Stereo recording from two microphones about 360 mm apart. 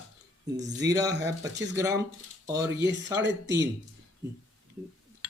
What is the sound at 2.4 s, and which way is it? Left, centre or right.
Speech, centre.